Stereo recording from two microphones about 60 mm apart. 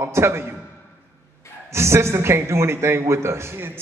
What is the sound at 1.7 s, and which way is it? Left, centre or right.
A man's voice, right.